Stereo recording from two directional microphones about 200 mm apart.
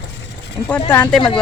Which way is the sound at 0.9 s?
10° left (ahead or behind).